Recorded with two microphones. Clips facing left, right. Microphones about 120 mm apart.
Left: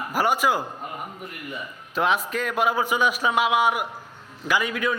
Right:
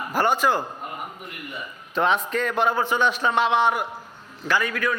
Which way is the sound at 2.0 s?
5° left (ahead or behind).